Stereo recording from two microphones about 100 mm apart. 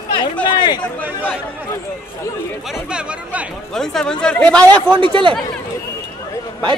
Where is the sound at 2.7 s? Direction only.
10° right (ahead or behind).